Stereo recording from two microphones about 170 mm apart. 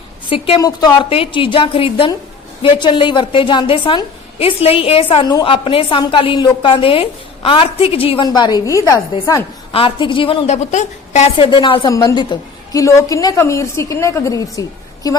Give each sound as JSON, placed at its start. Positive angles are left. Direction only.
{"t": 0.3, "sound": "a woman's voice", "side_deg": 35}
{"t": 0.6, "sound": "a woman's voice", "side_deg": 25}
{"t": 9.7, "sound": "a woman's voice", "side_deg": 30}